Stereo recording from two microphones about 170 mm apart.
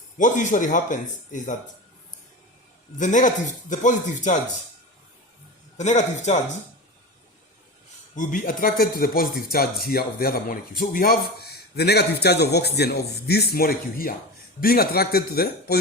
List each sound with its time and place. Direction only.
0.2 s speech: 50° left (ahead or behind)
3.0 s speech: 45° left (ahead or behind)
5.7 s speech: 45° left (ahead or behind)
8.1 s speech: 50° left (ahead or behind)
11.8 s a man's voice: 75° left (ahead or behind)